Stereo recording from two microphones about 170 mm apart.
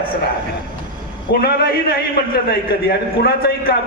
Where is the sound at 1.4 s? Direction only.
65° left (ahead or behind).